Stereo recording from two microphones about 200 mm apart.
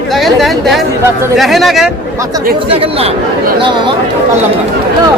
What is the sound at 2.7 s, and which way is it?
Speech, 30° right (ahead or behind).